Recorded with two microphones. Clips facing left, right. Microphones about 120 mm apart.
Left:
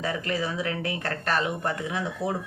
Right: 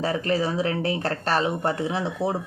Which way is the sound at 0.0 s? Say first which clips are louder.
Right 5 dB; 35° right (ahead or behind).